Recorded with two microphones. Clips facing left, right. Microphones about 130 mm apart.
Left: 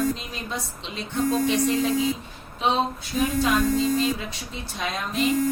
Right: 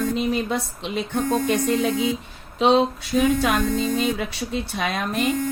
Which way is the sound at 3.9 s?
70° right (ahead or behind).